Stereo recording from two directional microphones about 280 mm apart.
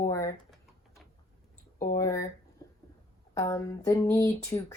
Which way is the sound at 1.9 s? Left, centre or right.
Centre.